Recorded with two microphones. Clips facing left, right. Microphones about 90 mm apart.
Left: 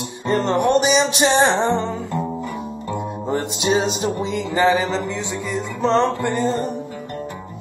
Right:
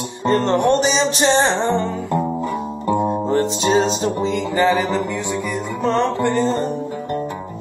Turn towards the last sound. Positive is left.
turn(degrees=15)  # may be behind; listen again after turning